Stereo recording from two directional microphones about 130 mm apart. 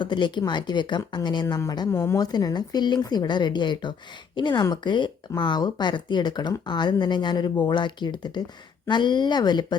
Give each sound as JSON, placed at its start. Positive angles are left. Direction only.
{"t": 0.0, "sound": "speech", "side_deg": 35}